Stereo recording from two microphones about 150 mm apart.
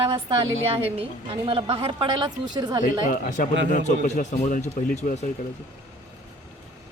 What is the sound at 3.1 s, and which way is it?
Speech, 60° left (ahead or behind).